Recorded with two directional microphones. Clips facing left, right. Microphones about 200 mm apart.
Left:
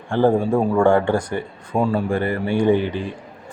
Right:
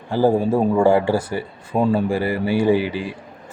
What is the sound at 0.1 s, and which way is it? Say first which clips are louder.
A man's voice: even; 5° right (ahead or behind).